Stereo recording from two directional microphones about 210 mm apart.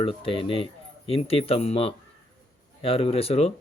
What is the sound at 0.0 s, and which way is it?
Speech, 25° left (ahead or behind).